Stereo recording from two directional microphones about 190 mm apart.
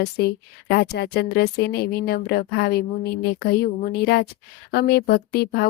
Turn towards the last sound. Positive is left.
turn(degrees=55)  # may be behind; listen again after turning